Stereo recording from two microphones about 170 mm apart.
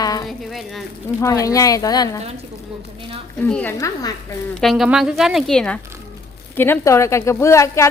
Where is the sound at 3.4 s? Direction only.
10° left (ahead or behind).